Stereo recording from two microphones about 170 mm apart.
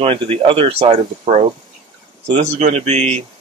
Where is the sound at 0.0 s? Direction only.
35° right (ahead or behind).